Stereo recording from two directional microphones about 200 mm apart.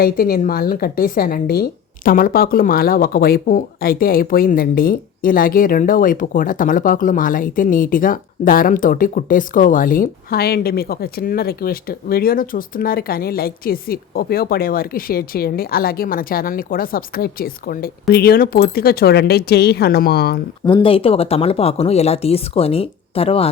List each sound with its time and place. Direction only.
0.0 s speech: 45° left (ahead or behind)
20.7 s speech: 25° left (ahead or behind)